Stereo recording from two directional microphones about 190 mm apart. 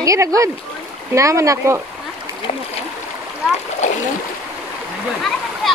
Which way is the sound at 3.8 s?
40° left (ahead or behind).